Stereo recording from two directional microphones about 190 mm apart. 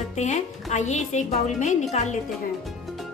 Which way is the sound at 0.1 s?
35° left (ahead or behind).